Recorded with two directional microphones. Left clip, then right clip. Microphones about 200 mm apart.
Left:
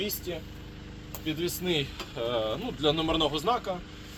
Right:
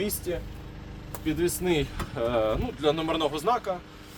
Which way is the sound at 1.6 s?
35° right (ahead or behind).